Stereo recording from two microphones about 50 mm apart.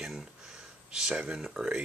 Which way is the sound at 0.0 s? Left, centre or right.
Centre.